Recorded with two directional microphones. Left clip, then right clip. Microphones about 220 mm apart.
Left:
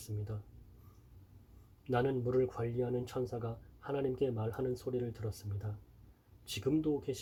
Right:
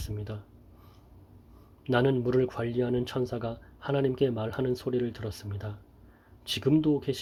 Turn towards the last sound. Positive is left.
turn(degrees=-40)  # may be behind; listen again after turning